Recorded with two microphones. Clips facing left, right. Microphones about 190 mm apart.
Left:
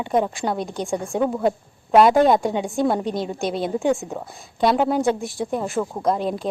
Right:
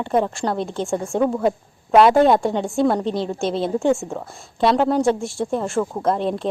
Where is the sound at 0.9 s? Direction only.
15° left (ahead or behind).